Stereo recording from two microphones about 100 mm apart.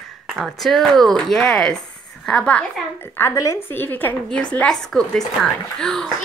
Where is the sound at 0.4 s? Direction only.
Centre (ahead or behind).